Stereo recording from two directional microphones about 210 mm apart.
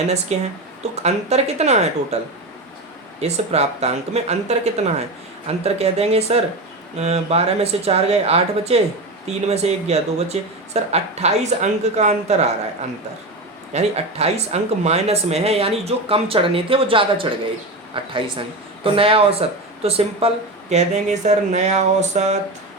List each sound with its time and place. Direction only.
0.3 s speech: 35° right (ahead or behind)
3.2 s speech: 30° right (ahead or behind)
13.7 s speech: 30° right (ahead or behind)